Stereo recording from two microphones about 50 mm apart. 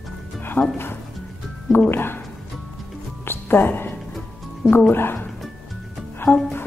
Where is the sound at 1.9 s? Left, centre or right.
Left.